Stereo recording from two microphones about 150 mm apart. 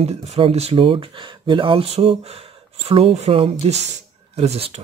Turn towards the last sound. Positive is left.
turn(degrees=-40)  # may be behind; listen again after turning